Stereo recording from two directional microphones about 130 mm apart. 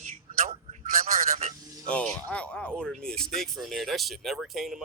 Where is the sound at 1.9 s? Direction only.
10° left (ahead or behind).